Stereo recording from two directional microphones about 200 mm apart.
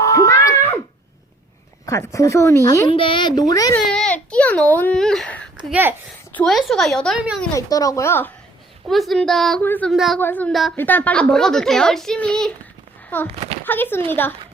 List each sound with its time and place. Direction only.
0.0 s a sound: 15° left (ahead or behind)
1.9 s speech: 15° left (ahead or behind)
2.9 s speech: 25° left (ahead or behind)
3.9 s a child's voice: 5° left (ahead or behind)
7.5 s speech: 15° left (ahead or behind)
8.9 s a woman's voice: centre (ahead or behind)
10.2 s a woman's voice: 10° left (ahead or behind)